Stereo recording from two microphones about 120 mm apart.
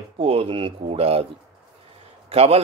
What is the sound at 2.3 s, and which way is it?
Speech, 55° right (ahead or behind).